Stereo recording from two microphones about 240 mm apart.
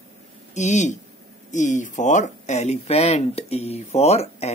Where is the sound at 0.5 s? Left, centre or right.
Left.